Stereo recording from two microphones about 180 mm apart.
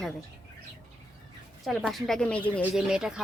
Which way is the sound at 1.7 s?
Centre (ahead or behind).